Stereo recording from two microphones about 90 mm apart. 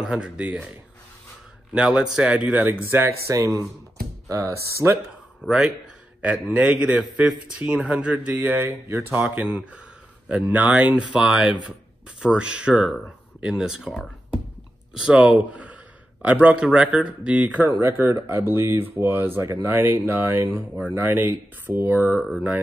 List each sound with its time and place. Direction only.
0.0 s speech: 10° right (ahead or behind)
1.7 s speech: 10° right (ahead or behind); by 4.9 s 30° right (ahead or behind)
5.4 s speech: 10° right (ahead or behind)
15.0 s speech: 10° right (ahead or behind)
17.6 s speech: 30° right (ahead or behind)